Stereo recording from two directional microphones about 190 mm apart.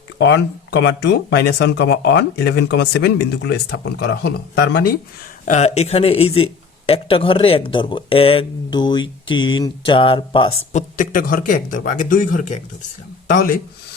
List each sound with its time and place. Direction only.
0.2 s speech: 65° left (ahead or behind)
5.5 s speech: 35° left (ahead or behind)